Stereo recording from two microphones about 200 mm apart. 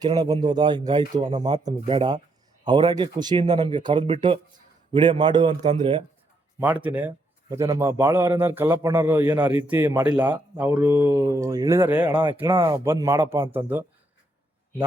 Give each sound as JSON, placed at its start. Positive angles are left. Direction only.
{"t": 0.0, "sound": "speech", "side_deg": -20}
{"t": 6.8, "sound": "a man's voice", "side_deg": -10}
{"t": 12.0, "sound": "a man's voice", "side_deg": -20}